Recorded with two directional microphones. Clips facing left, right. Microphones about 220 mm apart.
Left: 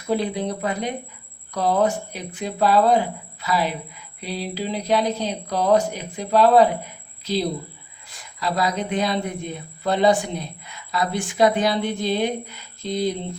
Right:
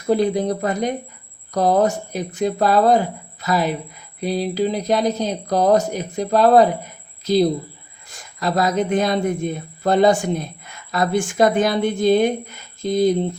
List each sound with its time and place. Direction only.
0.0 s speech: 45° right (ahead or behind)